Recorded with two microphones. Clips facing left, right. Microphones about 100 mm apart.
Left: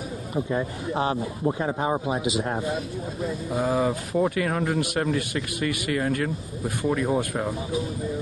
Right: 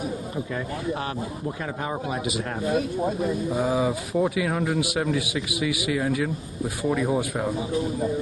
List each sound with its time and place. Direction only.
0.5 s speech: 25° left (ahead or behind)
3.4 s speech: centre (ahead or behind)